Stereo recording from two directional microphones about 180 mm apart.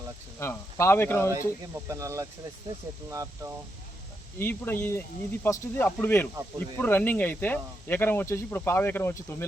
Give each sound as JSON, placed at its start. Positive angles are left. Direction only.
{"t": 0.3, "sound": "speech", "side_deg": 15}
{"t": 1.9, "sound": "speech", "side_deg": -15}
{"t": 4.4, "sound": "speech", "side_deg": 10}